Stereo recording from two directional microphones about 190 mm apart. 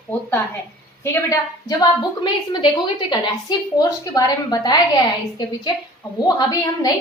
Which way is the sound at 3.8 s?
20° left (ahead or behind).